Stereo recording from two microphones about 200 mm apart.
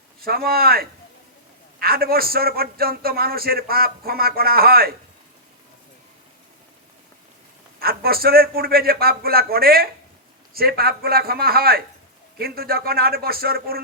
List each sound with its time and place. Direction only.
0.2 s a man's voice: 50° right (ahead or behind)
7.8 s a man's voice: 50° right (ahead or behind)